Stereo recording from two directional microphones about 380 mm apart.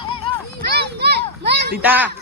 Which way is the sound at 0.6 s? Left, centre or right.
Right.